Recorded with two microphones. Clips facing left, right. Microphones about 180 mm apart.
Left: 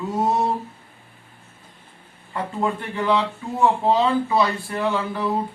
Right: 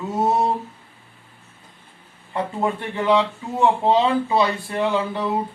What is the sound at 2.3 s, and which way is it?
Speech, 25° right (ahead or behind).